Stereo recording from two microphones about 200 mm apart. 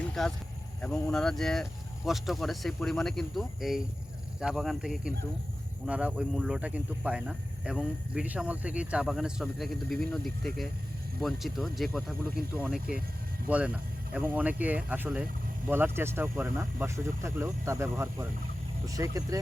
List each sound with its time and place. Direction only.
0.1 s speech: 5° left (ahead or behind)
13.5 s speech: 5° right (ahead or behind)